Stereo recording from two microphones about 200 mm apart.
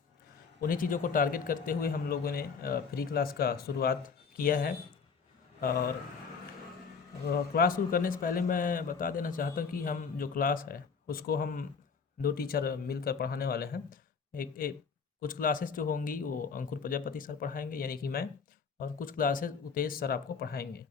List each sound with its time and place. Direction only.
0.6 s a man's voice: 45° left (ahead or behind)
7.3 s a man's voice: 50° left (ahead or behind)